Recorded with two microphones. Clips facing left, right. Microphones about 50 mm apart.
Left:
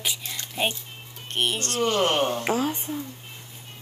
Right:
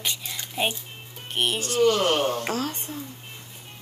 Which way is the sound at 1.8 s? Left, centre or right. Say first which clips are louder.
Right 2 dB; left.